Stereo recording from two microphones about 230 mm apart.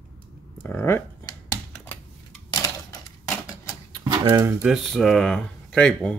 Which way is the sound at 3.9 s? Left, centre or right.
Centre.